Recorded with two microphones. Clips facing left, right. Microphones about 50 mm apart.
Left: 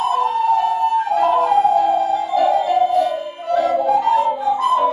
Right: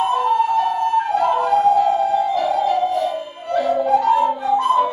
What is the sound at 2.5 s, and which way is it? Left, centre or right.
Music, centre.